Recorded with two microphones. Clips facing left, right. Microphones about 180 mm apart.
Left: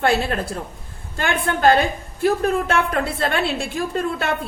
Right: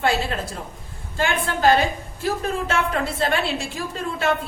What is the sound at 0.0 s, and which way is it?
A woman's voice, 60° left (ahead or behind).